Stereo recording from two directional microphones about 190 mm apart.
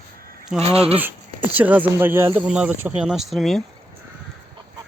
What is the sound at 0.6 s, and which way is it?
Speech, 30° right (ahead or behind).